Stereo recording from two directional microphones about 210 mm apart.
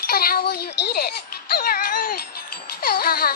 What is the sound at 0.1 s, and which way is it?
A child's voice, 45° left (ahead or behind).